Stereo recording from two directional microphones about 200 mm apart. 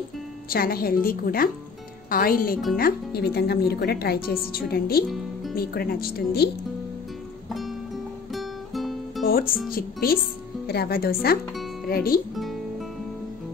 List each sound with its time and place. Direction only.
0.5 s speech: 50° left (ahead or behind)
8.4 s music: centre (ahead or behind)
9.2 s music: 45° left (ahead or behind)
9.7 s speech: 50° left (ahead or behind)